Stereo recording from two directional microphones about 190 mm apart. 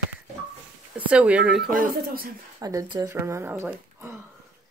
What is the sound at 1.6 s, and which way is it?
Speech, 50° right (ahead or behind).